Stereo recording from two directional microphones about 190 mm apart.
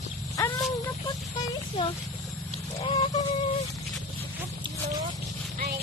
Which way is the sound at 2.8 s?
30° left (ahead or behind).